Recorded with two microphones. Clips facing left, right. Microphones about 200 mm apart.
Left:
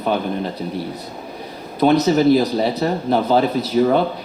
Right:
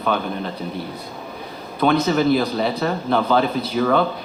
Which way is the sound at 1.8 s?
35° left (ahead or behind).